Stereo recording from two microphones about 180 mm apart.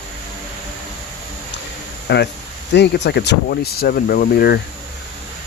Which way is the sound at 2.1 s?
70° left (ahead or behind).